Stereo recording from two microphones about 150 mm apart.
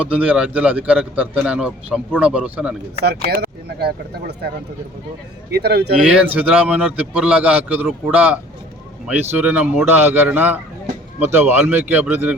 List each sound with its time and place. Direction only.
0.0 s a man's voice: 10° right (ahead or behind)
3.2 s speech: 90° right
5.5 s speech: 90° right
6.0 s a man's voice: 5° right (ahead or behind)